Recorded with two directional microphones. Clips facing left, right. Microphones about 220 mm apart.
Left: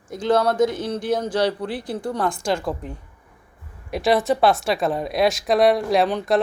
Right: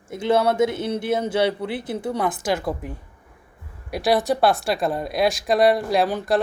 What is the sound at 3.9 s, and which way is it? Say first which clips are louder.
Speech: left 1 dB; centre (ahead or behind).